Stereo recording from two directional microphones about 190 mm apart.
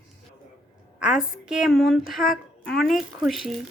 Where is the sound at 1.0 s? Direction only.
5° right (ahead or behind).